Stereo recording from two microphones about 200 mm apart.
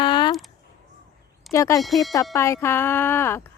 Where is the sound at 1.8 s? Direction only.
Centre (ahead or behind).